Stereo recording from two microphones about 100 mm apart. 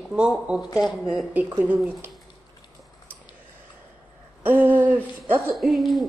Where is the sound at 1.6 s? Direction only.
15° right (ahead or behind).